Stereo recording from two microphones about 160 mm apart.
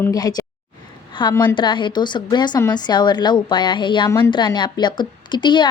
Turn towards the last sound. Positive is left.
turn(degrees=30)  # may be behind; listen again after turning